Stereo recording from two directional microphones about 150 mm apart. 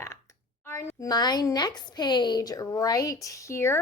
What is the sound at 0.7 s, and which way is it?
Speech, 20° left (ahead or behind).